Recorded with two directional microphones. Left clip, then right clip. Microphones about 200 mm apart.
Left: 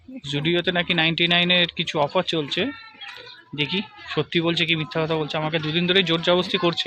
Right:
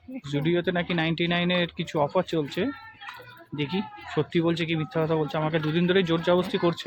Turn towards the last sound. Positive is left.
turn(degrees=0)  # may be behind; listen again after turning